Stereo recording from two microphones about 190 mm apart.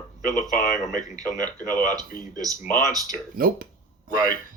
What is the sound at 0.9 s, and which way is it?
Speech, 20° right (ahead or behind).